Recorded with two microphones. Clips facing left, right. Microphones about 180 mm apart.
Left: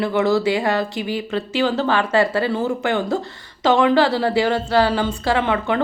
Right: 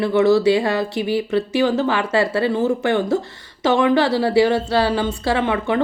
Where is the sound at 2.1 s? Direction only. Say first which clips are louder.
Even; 25° right (ahead or behind).